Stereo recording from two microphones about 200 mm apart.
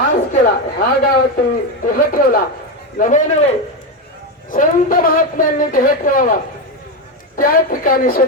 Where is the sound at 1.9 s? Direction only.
45° left (ahead or behind).